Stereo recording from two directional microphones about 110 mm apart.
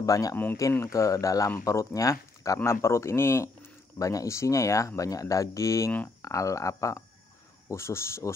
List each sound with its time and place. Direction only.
0.0 s speech: 30° left (ahead or behind)